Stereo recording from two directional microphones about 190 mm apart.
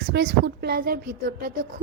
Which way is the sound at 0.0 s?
55° right (ahead or behind).